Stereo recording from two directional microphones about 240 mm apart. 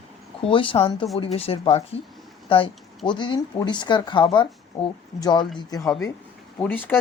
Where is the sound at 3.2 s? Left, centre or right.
Centre.